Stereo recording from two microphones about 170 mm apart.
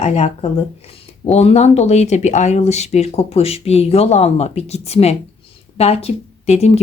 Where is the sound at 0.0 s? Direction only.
40° left (ahead or behind).